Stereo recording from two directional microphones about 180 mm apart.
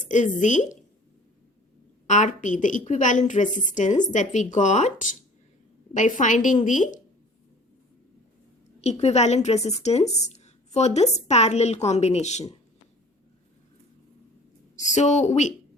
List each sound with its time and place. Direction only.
0.1 s a woman's voice: 45° left (ahead or behind)
2.0 s a woman's voice: 40° left (ahead or behind)
5.9 s a woman's voice: 45° left (ahead or behind)
8.8 s a woman's voice: 35° left (ahead or behind)
14.8 s a woman's voice: 40° left (ahead or behind)